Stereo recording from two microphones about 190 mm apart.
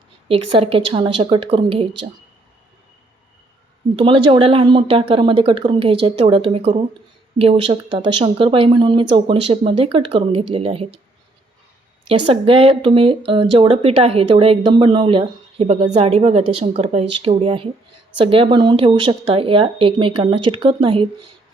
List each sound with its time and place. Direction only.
0.3 s speech: 30° right (ahead or behind)
3.9 s speech: 25° right (ahead or behind)
12.0 s speech: 30° right (ahead or behind)